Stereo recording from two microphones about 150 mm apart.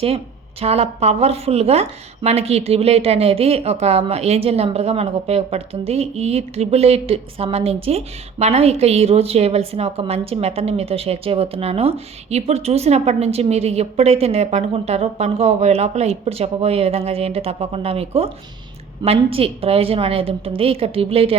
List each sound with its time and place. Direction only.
0.6 s a woman's voice: 45° right (ahead or behind)